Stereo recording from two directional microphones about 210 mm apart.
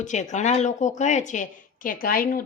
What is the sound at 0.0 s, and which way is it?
Speech, 35° left (ahead or behind).